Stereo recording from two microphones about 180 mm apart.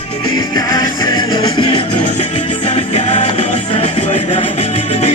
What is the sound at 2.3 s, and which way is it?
Music, 30° left (ahead or behind).